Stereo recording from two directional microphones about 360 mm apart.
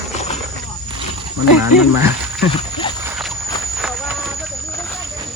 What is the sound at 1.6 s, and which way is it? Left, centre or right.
Speech, centre.